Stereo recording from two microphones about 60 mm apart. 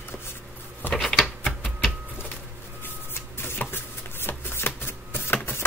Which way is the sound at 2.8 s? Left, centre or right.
Left.